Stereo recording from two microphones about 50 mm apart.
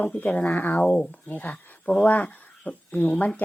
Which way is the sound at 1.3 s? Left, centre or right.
Left.